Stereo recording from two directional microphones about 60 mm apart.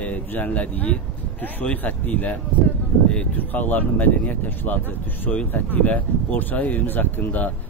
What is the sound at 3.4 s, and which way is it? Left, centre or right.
Speech, left.